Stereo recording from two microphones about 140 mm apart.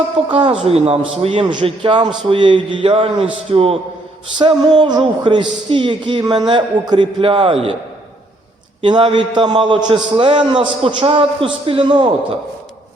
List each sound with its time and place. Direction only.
0.3 s a man's voice: 35° right (ahead or behind)
4.4 s a man's voice: 35° right (ahead or behind)
8.8 s a man's voice: 35° right (ahead or behind)